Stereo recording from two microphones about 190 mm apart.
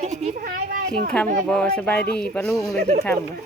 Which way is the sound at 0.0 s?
35° right (ahead or behind).